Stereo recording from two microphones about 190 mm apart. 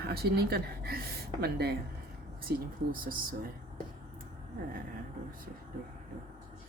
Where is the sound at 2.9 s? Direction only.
45° right (ahead or behind).